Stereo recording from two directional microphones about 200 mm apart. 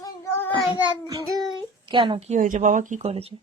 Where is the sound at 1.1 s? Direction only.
15° right (ahead or behind).